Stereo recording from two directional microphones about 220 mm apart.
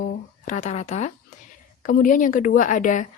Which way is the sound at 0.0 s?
35° left (ahead or behind).